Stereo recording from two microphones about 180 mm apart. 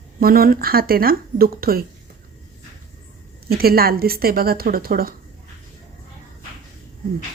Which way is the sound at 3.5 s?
55° right (ahead or behind).